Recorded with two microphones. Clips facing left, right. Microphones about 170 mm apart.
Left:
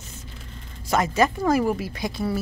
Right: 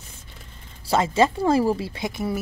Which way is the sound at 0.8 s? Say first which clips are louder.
Right 1 dB; 25° right (ahead or behind).